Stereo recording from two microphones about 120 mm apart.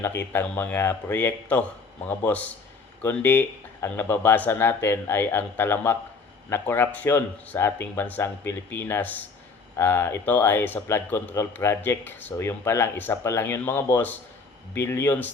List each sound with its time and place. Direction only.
0.0 s speech: 20° left (ahead or behind)